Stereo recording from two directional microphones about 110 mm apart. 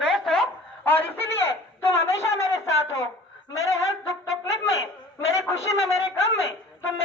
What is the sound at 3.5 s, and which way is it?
Music, 30° left (ahead or behind).